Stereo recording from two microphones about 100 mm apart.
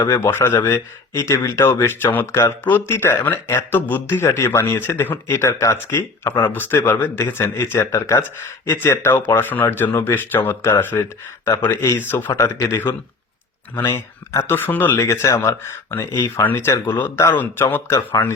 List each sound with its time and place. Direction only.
0.0 s speech: 25° left (ahead or behind)